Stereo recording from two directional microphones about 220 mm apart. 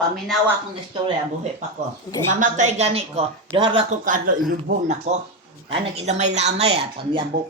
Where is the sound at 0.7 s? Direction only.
20° right (ahead or behind).